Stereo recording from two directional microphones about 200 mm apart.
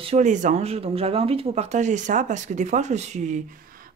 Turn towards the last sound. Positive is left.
turn(degrees=-45)  # may be behind; listen again after turning